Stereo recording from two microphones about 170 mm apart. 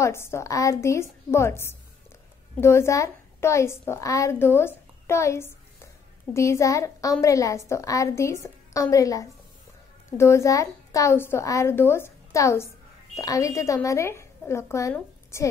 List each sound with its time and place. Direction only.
0.0 s a woman's voice: 15° left (ahead or behind)